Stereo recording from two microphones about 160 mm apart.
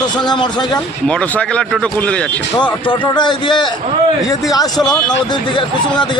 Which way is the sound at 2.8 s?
30° left (ahead or behind).